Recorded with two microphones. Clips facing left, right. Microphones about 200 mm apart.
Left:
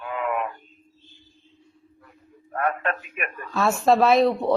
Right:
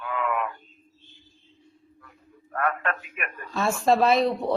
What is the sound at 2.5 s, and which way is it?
Speech, 25° left (ahead or behind).